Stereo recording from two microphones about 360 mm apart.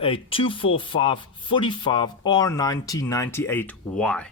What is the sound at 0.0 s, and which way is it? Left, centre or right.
Speech, centre.